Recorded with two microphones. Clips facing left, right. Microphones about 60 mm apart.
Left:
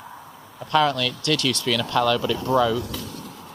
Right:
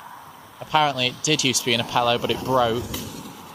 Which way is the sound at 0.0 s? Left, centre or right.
Centre.